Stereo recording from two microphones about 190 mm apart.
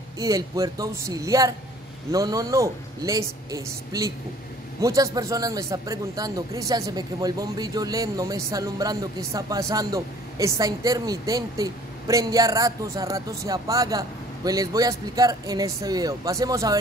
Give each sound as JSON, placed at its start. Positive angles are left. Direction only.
{"t": 0.2, "sound": "a man's voice", "side_deg": -15}